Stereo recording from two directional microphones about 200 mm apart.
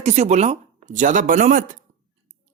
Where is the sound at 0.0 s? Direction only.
35° right (ahead or behind).